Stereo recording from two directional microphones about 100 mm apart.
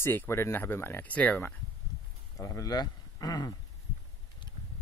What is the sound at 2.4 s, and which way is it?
Speech, 35° left (ahead or behind).